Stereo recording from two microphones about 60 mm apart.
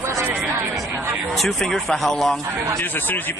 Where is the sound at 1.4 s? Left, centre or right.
Centre.